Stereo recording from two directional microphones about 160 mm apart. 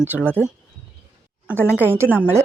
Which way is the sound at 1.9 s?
15° right (ahead or behind).